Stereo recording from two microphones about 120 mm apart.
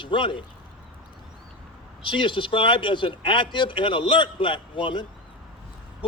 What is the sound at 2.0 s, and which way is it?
Speech, 45° left (ahead or behind).